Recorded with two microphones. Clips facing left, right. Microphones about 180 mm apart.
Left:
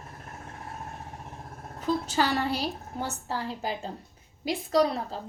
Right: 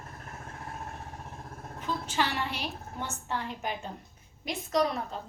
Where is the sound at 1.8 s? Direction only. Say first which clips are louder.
Left 5 dB; 40° left (ahead or behind).